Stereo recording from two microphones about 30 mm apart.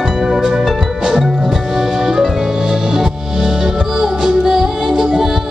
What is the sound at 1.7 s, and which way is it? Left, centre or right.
Music, centre.